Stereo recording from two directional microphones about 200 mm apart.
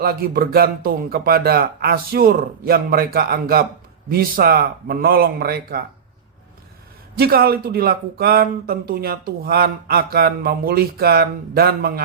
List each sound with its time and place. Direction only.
0.0 s speech: 50° right (ahead or behind)
7.2 s speech: 50° right (ahead or behind)